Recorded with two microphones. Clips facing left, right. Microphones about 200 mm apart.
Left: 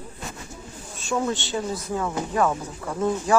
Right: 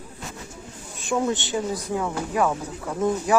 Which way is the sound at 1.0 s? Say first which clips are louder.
Right 2 dB; 15° right (ahead or behind).